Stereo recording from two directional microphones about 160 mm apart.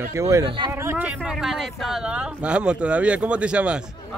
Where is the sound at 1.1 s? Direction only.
Centre (ahead or behind).